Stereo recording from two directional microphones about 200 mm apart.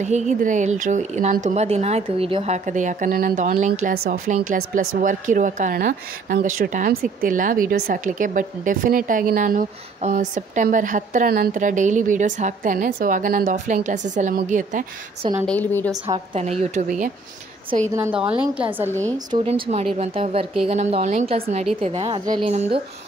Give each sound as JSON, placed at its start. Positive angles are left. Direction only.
{"t": 0.0, "sound": "a woman's voice", "side_deg": -35}
{"t": 3.9, "sound": "a woman's voice", "side_deg": -50}
{"t": 15.4, "sound": "a woman's voice", "side_deg": 10}
{"t": 17.9, "sound": "a woman's voice", "side_deg": -10}
{"t": 19.1, "sound": "a woman's voice", "side_deg": -25}
{"t": 22.5, "sound": "a woman's voice", "side_deg": -35}